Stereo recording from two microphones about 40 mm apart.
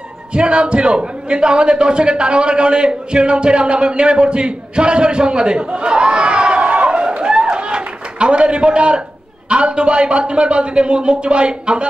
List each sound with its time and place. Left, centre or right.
0.3 s a man's voice: right